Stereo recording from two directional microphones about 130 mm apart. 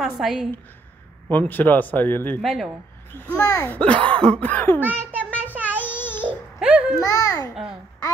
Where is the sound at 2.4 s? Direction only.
Centre (ahead or behind).